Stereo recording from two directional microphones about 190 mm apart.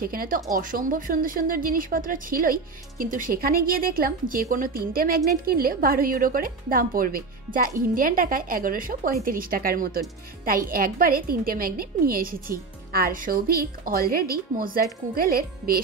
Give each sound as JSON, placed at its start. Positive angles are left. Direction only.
{"t": 0.0, "sound": "speech", "side_deg": -50}